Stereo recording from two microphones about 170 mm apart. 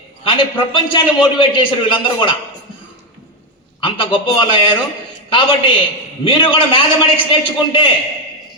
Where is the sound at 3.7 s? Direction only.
30° left (ahead or behind).